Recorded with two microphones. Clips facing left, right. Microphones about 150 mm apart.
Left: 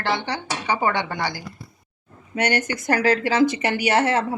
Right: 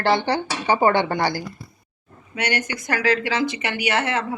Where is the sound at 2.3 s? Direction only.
45° left (ahead or behind).